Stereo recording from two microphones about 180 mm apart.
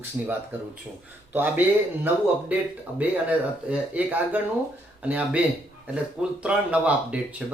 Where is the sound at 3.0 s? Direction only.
10° right (ahead or behind).